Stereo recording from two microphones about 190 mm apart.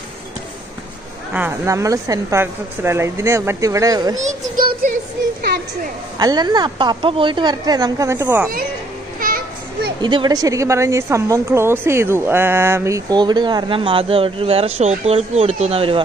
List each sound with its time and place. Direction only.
1.3 s a woman's voice: 10° right (ahead or behind)
4.2 s a sound: 45° right (ahead or behind)
6.1 s a woman's voice: 20° right (ahead or behind)
10.0 s a woman's voice: 25° right (ahead or behind)